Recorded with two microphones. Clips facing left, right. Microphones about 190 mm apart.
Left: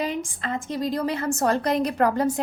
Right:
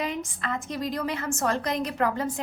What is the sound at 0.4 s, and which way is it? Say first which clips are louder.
A woman's voice: left 3 dB; 30° left (ahead or behind).